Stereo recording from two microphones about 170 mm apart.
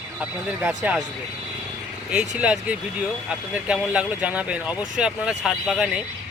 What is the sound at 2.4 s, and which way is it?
Speech, 5° right (ahead or behind).